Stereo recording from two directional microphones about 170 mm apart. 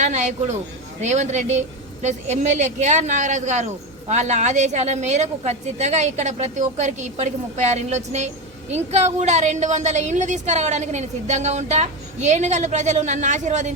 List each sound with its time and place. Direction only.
0.0 s a woman's voice: 45° right (ahead or behind)